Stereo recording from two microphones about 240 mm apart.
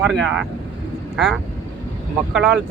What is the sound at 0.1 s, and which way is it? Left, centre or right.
Speech, centre.